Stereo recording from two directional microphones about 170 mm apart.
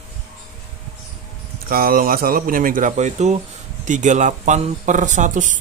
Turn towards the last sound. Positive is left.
turn(degrees=-50)  # may be behind; listen again after turning